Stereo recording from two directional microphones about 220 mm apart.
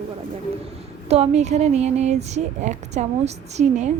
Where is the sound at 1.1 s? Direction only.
30° right (ahead or behind).